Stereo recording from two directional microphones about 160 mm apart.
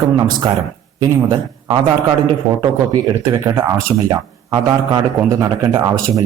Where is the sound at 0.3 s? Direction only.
25° right (ahead or behind).